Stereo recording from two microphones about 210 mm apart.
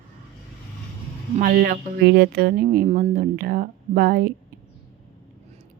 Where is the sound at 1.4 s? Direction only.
45° right (ahead or behind).